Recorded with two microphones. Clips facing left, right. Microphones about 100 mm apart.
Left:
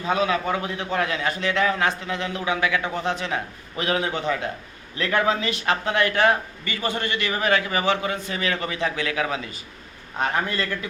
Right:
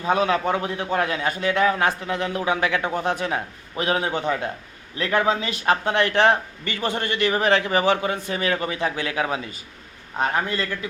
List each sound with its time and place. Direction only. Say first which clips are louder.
0.0 s a man's voice: right 2 dB; 45° right (ahead or behind); by 1.9 s 25° right (ahead or behind)
2.0 s a man's voice: right 3 dB; 40° right (ahead or behind)
3.3 s a man's voice: right 1 dB; 35° right (ahead or behind)
7.4 s a man's voice: right 1 dB; 35° right (ahead or behind)